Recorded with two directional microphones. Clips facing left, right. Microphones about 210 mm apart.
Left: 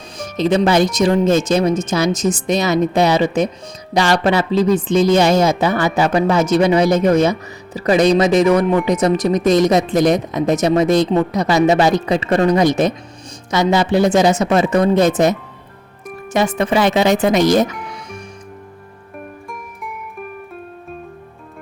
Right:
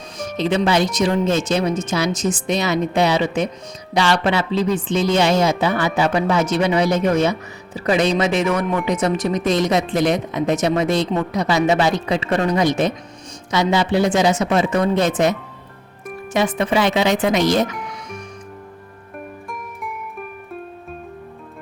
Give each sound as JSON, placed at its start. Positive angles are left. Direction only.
{"t": 0.2, "sound": "speech", "side_deg": 40}